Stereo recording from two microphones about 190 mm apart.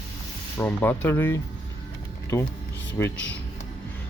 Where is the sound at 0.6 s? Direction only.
10° left (ahead or behind).